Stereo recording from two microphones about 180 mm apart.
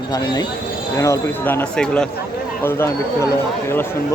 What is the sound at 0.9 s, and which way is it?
Speech, 15° left (ahead or behind).